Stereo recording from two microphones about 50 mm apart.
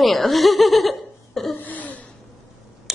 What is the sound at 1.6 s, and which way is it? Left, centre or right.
Throat clearing, left.